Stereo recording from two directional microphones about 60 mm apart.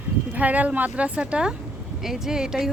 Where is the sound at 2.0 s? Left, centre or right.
Centre.